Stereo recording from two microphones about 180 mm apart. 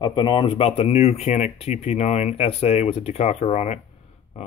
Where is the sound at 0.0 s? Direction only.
25° left (ahead or behind).